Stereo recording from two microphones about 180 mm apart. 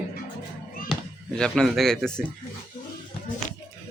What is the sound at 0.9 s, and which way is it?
Speech, 5° left (ahead or behind).